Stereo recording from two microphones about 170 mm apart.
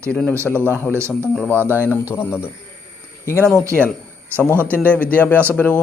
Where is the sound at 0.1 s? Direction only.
5° left (ahead or behind).